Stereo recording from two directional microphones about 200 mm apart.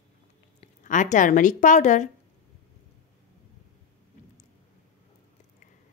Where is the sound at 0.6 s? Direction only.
40° left (ahead or behind).